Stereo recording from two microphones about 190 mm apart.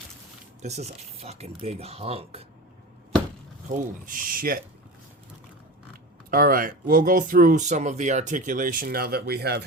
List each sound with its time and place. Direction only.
1.2 s speech: 35° right (ahead or behind)
3.7 s speech: 45° right (ahead or behind)
6.3 s speech: 50° right (ahead or behind)